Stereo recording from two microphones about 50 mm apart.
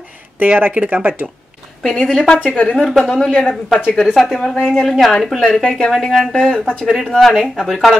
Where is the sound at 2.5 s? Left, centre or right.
Left.